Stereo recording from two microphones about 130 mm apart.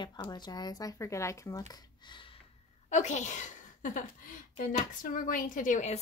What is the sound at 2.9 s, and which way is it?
A woman's voice, 65° left (ahead or behind).